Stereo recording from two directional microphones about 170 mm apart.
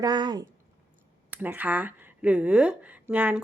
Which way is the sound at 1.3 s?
10° right (ahead or behind).